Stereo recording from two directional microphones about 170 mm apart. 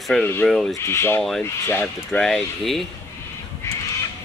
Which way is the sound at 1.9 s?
5° left (ahead or behind).